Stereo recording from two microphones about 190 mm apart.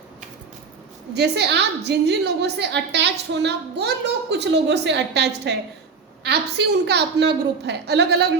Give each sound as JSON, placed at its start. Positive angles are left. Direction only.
{"t": 1.1, "sound": "a woman's voice", "side_deg": -60}